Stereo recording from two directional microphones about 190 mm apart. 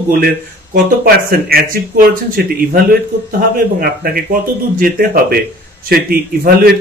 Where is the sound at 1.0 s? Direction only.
50° right (ahead or behind).